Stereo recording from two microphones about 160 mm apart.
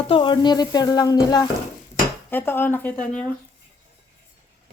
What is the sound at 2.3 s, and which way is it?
Speech, 15° left (ahead or behind).